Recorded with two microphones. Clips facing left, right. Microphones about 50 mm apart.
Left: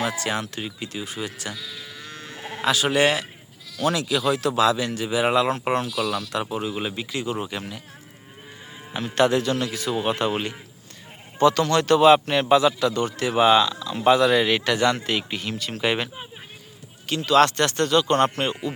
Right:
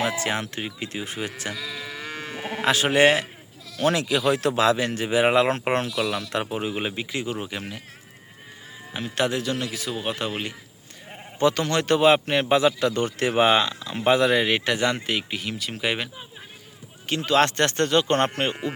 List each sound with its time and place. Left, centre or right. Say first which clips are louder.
0.0 s speech: right 1 dB; right
2.6 s a man's voice: right 2 dB; right
6.0 s speech: even; right; by 7.6 s centre
9.0 s a man's voice: left 5 dB; centre
11.3 s speech: left 3 dB; right; by 16.0 s centre
17.1 s speech: left 3 dB; right